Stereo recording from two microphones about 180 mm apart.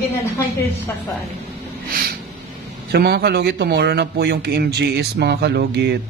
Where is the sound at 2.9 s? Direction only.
65° right (ahead or behind).